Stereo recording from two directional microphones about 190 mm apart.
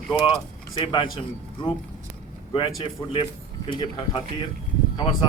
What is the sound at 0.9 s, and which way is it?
A man's voice, 25° left (ahead or behind).